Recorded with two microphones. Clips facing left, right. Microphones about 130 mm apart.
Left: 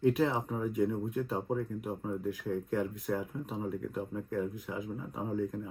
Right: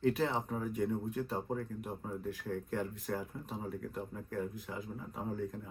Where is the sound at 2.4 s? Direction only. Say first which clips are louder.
Left 4 dB; 15° left (ahead or behind).